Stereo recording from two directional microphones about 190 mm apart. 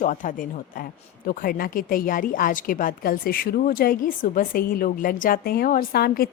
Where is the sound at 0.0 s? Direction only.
40° left (ahead or behind).